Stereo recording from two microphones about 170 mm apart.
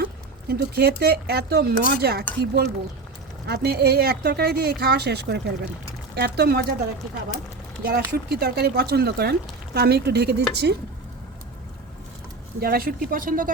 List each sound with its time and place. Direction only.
0.0 s speech: 65° right (ahead or behind)
7.8 s speech: 65° right (ahead or behind)
12.5 s speech: 60° right (ahead or behind)